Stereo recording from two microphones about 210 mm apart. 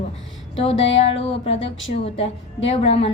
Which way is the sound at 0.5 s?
30° left (ahead or behind).